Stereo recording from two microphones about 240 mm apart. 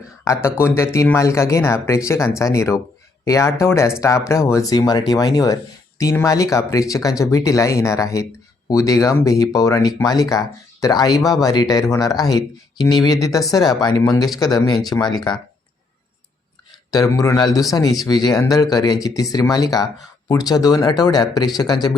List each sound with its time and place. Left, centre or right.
0.6 s speech: centre
16.9 s speech: centre